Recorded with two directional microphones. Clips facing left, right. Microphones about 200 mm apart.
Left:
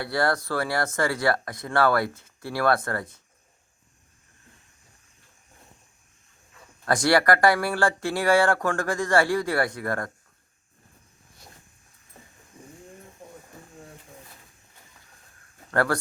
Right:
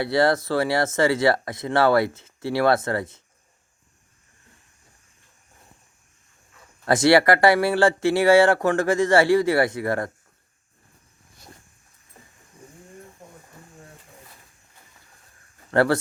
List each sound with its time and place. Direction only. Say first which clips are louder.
0.0 s speech: right 5 dB; 20° right (ahead or behind)
6.8 s speech: right 4 dB; 20° right (ahead or behind)
15.7 s speech: right 5 dB; 20° right (ahead or behind)